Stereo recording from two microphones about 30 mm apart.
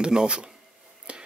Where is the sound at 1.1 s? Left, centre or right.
Right.